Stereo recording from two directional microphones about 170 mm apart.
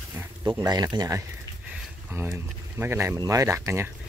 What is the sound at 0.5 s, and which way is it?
Speech, 25° right (ahead or behind).